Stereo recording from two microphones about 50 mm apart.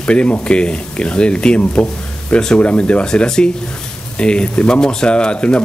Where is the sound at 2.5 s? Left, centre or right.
Left.